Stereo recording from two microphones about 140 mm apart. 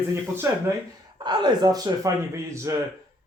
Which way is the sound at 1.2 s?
30° right (ahead or behind).